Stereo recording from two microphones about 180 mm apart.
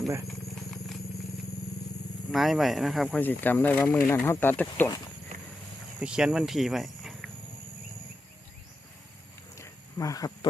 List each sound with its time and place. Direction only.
0.3 s vehicle: centre (ahead or behind)
2.3 s speech: centre (ahead or behind)
6.0 s speech: 5° right (ahead or behind)
9.6 s a sound: 20° left (ahead or behind)